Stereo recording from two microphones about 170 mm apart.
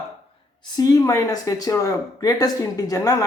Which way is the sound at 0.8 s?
20° left (ahead or behind).